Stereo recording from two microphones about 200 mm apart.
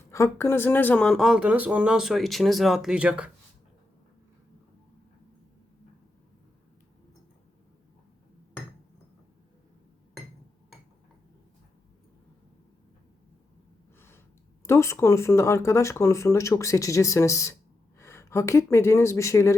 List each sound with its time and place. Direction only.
0.1 s speech: 15° left (ahead or behind); by 3.3 s 5° right (ahead or behind)
14.6 s speech: 15° left (ahead or behind)